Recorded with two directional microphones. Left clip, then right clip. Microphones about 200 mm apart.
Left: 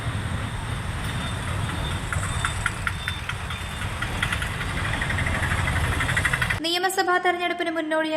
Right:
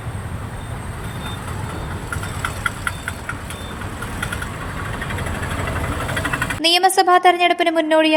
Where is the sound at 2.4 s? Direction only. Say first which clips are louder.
Right 5 dB; 50° right (ahead or behind).